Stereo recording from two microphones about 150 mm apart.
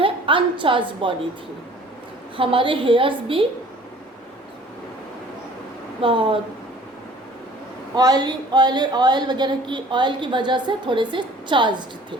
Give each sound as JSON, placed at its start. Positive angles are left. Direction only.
{"t": 0.0, "sound": "a woman's voice", "side_deg": -35}
{"t": 2.3, "sound": "a woman's voice", "side_deg": -35}
{"t": 6.0, "sound": "a woman's voice", "side_deg": -35}
{"t": 7.9, "sound": "a woman's voice", "side_deg": -25}